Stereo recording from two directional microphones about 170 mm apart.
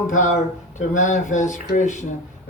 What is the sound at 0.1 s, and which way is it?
Speech, 45° left (ahead or behind).